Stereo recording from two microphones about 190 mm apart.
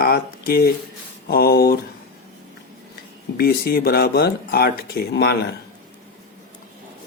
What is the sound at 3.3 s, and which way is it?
Speech, 55° left (ahead or behind).